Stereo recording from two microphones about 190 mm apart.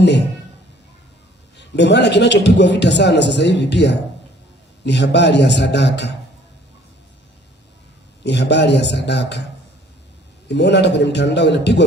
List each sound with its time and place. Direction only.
1.5 s a man's voice: 65° left (ahead or behind)
8.2 s a man's voice: 65° left (ahead or behind)
10.5 s a man's voice: 65° left (ahead or behind)